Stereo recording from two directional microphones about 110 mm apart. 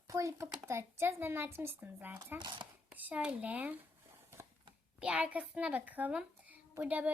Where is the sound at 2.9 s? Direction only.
15° right (ahead or behind).